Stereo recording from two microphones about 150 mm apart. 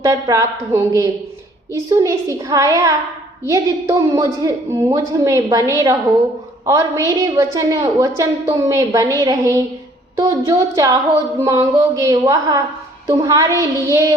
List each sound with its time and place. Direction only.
0.0 s a woman's voice: 20° right (ahead or behind)